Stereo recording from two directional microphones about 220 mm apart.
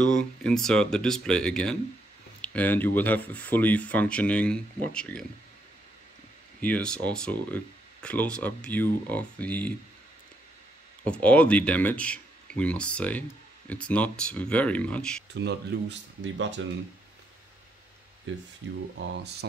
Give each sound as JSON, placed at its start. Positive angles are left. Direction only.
{"t": 0.0, "sound": "speech", "side_deg": 5}
{"t": 6.6, "sound": "speech", "side_deg": 5}
{"t": 11.1, "sound": "speech", "side_deg": 5}
{"t": 15.3, "sound": "speech", "side_deg": -50}
{"t": 19.0, "sound": "speech", "side_deg": -50}